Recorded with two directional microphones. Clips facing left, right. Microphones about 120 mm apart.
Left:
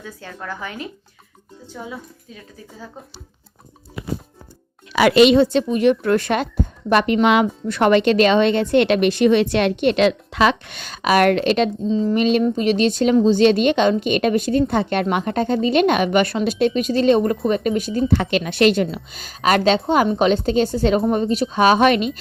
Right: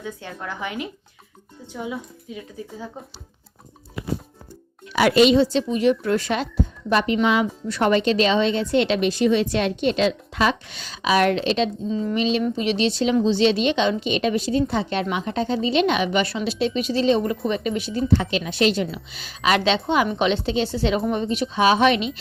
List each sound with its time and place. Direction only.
0.4 s a woman's voice: 20° right (ahead or behind)
4.9 s a woman's voice: 85° left; by 11.7 s 55° left (ahead or behind)
11.9 s speech: 30° left (ahead or behind)
12.1 s speech: 50° left (ahead or behind)
18.2 s speech: 60° left (ahead or behind)